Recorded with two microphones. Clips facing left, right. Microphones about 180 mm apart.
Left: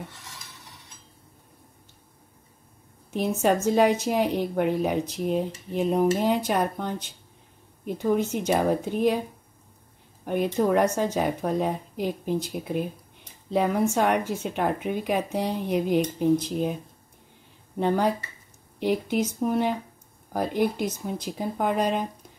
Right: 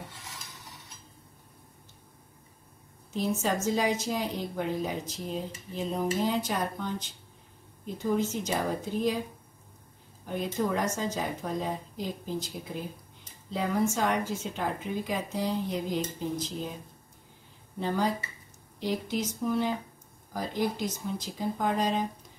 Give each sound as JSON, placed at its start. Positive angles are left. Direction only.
{"t": 3.1, "sound": "speech", "side_deg": 65}
{"t": 10.2, "sound": "speech", "side_deg": 65}
{"t": 17.7, "sound": "speech", "side_deg": 60}